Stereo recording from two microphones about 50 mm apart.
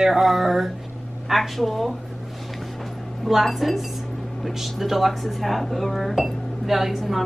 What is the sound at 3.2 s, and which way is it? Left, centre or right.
A woman's voice, centre.